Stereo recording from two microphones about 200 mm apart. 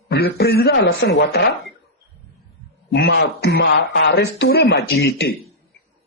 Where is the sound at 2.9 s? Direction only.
55° left (ahead or behind).